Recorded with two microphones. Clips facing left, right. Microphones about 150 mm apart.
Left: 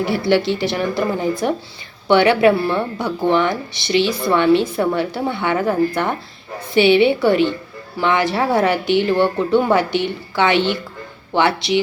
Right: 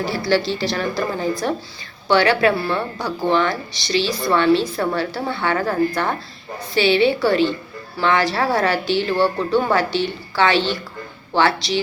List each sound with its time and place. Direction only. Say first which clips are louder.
0.0 s speech: left 3 dB; 20° left (ahead or behind)